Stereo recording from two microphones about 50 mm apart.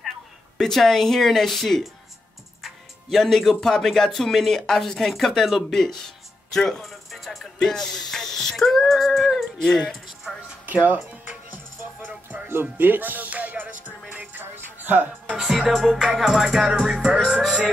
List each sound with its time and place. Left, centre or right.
0.6 s music: centre
2.6 s speech: centre
6.8 s music: centre
7.6 s a sound: centre
9.6 s speech: centre
10.7 s speech: right
11.1 s music: right
12.7 s music: right
15.3 s music: centre